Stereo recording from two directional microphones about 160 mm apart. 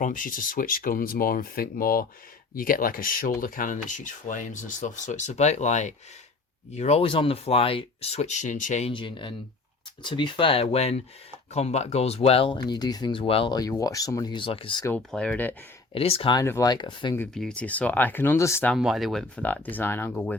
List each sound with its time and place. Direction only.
0.0 s speech: 55° left (ahead or behind)
8.9 s speech: 30° left (ahead or behind)
12.6 s speech: 25° left (ahead or behind)
14.8 s speech: 5° left (ahead or behind)
16.0 s speech: 35° left (ahead or behind)
16.4 s speech: 20° left (ahead or behind)
17.3 s speech: 5° left (ahead or behind)
18.7 s speech: centre (ahead or behind)